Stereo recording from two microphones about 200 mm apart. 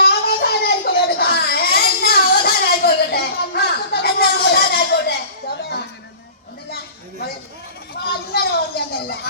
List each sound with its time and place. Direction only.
0.0 s baby cry: 50° left (ahead or behind)
8.0 s a woman's voice: 55° left (ahead or behind)